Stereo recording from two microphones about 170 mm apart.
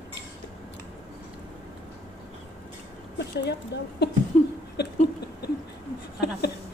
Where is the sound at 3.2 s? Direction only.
85° left.